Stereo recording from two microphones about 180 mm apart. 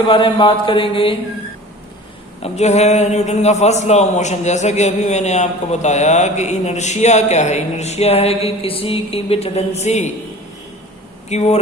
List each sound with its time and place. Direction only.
0.1 s mantra: 30° left (ahead or behind)
2.4 s a man's voice: 40° left (ahead or behind)
11.3 s a man's voice: 35° left (ahead or behind)